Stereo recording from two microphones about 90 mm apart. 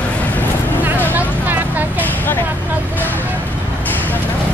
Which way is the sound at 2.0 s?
20° left (ahead or behind).